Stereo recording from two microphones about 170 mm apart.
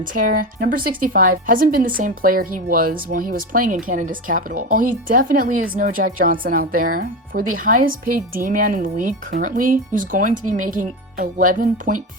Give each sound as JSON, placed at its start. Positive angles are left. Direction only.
{"t": 0.0, "sound": "speech", "side_deg": -50}